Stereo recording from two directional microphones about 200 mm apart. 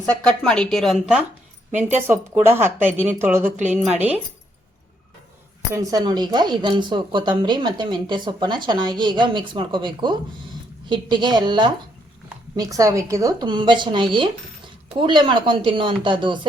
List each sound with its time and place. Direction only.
0.4 s speech: 5° left (ahead or behind)
2.0 s a woman's voice: 10° right (ahead or behind)
5.7 s speech: 15° right (ahead or behind)